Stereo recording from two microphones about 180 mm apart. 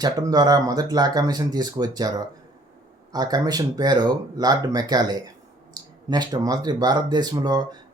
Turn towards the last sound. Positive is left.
turn(degrees=-20)  # may be behind; listen again after turning